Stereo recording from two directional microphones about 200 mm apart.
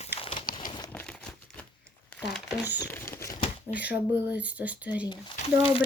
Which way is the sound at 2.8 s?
15° left (ahead or behind).